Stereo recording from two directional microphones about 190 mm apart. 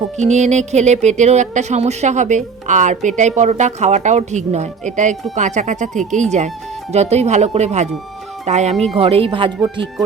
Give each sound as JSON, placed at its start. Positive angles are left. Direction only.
{"t": 0.2, "sound": "speech", "side_deg": -35}